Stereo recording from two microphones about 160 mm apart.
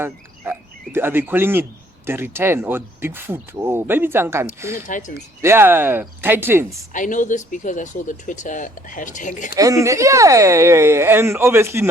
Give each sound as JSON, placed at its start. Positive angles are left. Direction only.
{"t": 0.9, "sound": "speech", "side_deg": -15}
{"t": 4.9, "sound": "speech", "side_deg": 55}
{"t": 5.4, "sound": "speech", "side_deg": -15}
{"t": 6.9, "sound": "speech", "side_deg": 55}
{"t": 9.6, "sound": "speech", "side_deg": -20}